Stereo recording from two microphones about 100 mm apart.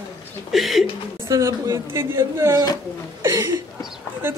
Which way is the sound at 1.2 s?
30° right (ahead or behind).